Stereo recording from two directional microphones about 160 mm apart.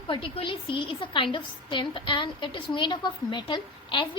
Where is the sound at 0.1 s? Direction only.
35° left (ahead or behind).